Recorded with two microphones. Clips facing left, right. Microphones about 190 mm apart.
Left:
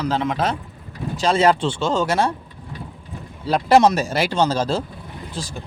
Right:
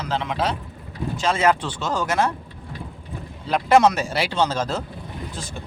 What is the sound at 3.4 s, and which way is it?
Speech, 35° left (ahead or behind).